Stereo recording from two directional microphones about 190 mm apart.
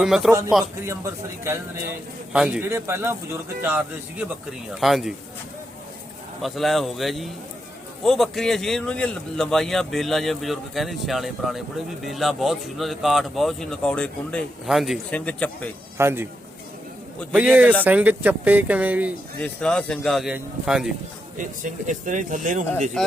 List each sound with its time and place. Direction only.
0.0 s speech: 5° right (ahead or behind)
0.9 s speech: 15° right (ahead or behind)
2.3 s speech: 5° right (ahead or behind)
6.4 s speech: centre (ahead or behind)
16.0 s speech: 15° right (ahead or behind)
17.3 s speech: 10° right (ahead or behind)
19.4 s speech: 5° left (ahead or behind)
21.3 s speech: 45° right (ahead or behind)
23.0 s speech: 5° left (ahead or behind)